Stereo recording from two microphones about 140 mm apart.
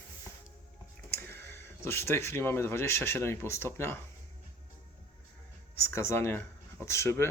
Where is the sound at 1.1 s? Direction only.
15° left (ahead or behind).